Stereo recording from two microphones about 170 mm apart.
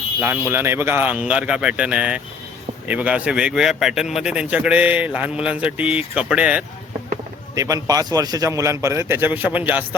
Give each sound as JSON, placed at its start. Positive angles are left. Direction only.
{"t": 0.2, "sound": "a man's voice", "side_deg": -10}
{"t": 7.5, "sound": "a man's voice", "side_deg": -20}